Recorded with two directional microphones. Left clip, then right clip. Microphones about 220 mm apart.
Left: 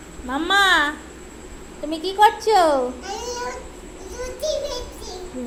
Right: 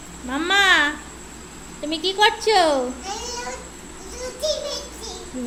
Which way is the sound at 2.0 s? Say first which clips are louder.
Left 2 dB; 15° right (ahead or behind).